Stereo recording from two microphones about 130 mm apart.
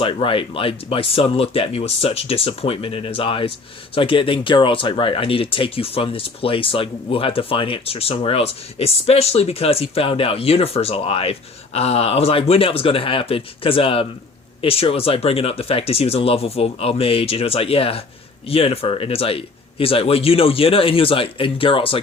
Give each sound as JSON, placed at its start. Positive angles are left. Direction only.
{"t": 0.0, "sound": "speech", "side_deg": 40}